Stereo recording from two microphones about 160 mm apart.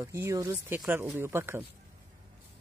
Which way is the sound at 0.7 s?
5° right (ahead or behind).